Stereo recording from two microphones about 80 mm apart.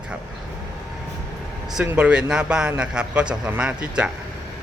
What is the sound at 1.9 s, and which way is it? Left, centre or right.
Speech, centre.